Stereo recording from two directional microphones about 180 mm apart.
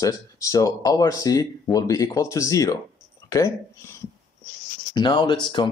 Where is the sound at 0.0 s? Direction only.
20° left (ahead or behind).